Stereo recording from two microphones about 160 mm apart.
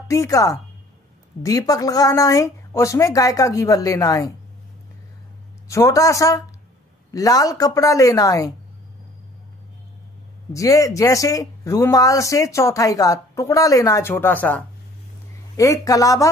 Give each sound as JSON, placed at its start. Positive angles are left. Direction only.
{"t": 0.1, "sound": "speech", "side_deg": 20}
{"t": 5.7, "sound": "speech", "side_deg": 20}
{"t": 10.5, "sound": "speech", "side_deg": 20}